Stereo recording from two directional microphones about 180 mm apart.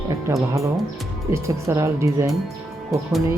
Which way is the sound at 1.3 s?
15° right (ahead or behind).